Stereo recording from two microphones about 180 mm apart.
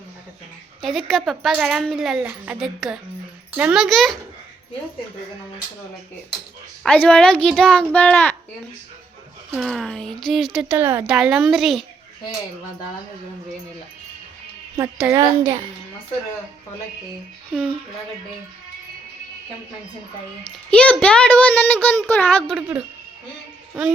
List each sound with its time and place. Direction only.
0.8 s speech: centre (ahead or behind)
6.8 s speech: 5° left (ahead or behind)
9.6 s speech: centre (ahead or behind)
14.8 s a child's voice: 15° right (ahead or behind)
17.5 s speech: 5° right (ahead or behind)
20.4 s speech: 5° left (ahead or behind)